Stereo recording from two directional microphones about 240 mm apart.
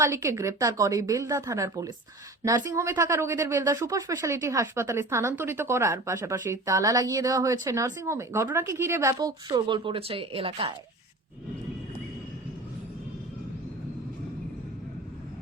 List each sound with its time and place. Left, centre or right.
0.0 s speech: centre